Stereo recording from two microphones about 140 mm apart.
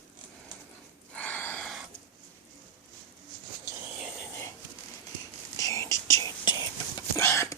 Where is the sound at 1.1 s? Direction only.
10° left (ahead or behind).